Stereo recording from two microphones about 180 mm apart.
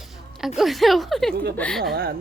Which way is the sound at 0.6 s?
Centre (ahead or behind).